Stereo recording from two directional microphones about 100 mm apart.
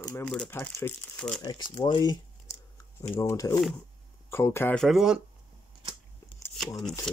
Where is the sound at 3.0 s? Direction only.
30° left (ahead or behind).